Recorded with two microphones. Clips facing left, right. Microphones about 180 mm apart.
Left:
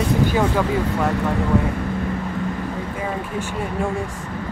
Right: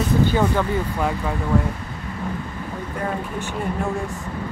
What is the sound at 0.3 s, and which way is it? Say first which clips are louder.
Speech: left 1 dB; 10° left (ahead or behind).